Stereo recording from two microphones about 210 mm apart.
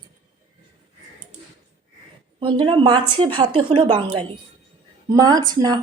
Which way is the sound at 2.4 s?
25° right (ahead or behind).